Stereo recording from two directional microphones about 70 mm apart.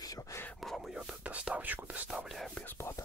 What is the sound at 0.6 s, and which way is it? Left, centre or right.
Whispering, centre.